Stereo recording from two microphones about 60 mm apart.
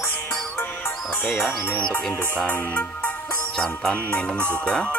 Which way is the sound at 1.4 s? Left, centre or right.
Left.